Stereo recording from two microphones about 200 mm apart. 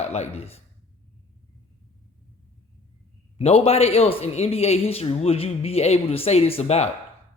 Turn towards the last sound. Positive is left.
turn(degrees=30)  # may be behind; listen again after turning